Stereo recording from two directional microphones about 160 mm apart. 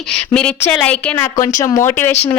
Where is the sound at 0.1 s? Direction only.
5° left (ahead or behind).